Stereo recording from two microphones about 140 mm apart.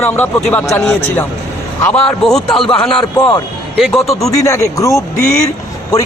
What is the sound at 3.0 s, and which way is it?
Speech, 30° left (ahead or behind).